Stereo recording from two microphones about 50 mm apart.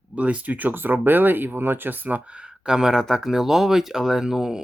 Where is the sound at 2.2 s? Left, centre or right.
Right.